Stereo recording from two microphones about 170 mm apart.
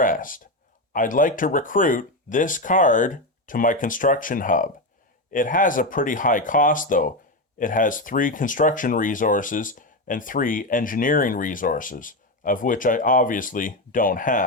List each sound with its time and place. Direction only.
0.0 s speech: 50° left (ahead or behind)